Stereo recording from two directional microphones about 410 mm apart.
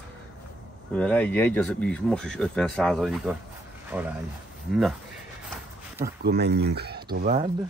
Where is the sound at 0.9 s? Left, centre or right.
Centre.